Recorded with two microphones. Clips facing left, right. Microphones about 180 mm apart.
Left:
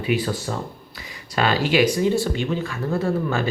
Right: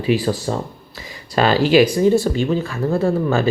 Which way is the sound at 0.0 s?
35° right (ahead or behind).